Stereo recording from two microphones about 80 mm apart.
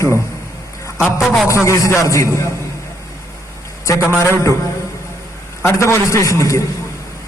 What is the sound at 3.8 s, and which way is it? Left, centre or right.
Speech, left.